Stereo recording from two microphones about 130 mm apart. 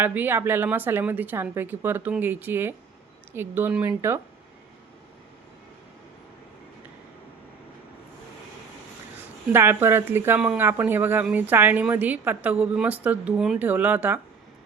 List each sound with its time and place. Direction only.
0.0 s a woman's voice: 15° right (ahead or behind)
9.5 s a woman's voice: 20° right (ahead or behind)